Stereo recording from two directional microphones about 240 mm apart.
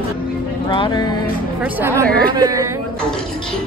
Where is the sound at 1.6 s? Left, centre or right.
Centre.